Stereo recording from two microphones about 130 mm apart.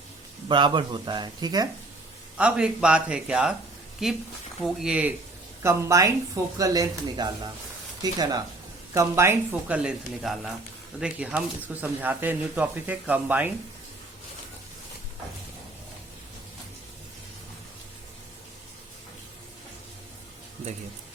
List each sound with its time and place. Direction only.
0.4 s speech: 35° right (ahead or behind)
2.4 s speech: 5° right (ahead or behind)
5.6 s speech: 25° right (ahead or behind)